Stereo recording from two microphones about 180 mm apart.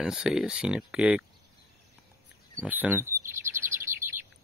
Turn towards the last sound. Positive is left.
turn(degrees=-15)  # may be behind; listen again after turning